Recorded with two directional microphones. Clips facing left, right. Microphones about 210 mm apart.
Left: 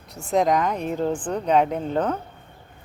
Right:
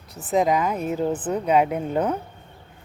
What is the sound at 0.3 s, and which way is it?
A woman's voice, 5° right (ahead or behind).